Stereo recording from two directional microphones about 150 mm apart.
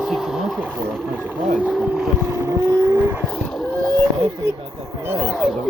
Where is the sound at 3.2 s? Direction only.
5° left (ahead or behind).